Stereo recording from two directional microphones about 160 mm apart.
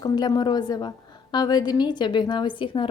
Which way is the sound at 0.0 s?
25° left (ahead or behind).